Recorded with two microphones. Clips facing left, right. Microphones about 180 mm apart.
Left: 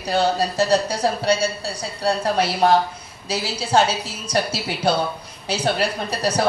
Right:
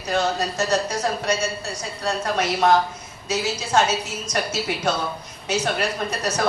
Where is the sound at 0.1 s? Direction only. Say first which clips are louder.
Left 3 dB; 30° left (ahead or behind).